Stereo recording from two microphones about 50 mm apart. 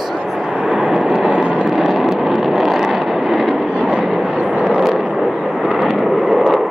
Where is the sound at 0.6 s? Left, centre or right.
Centre.